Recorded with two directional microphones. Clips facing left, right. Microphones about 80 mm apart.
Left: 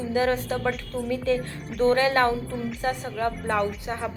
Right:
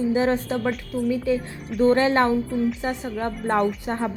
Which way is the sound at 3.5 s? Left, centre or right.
Right.